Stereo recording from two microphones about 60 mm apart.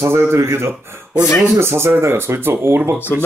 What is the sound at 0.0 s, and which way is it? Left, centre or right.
Speech, right.